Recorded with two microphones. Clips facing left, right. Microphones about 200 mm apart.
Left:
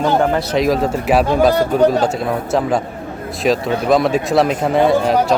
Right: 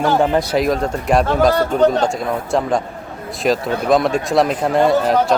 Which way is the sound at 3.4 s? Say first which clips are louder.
Left 1 dB; centre (ahead or behind).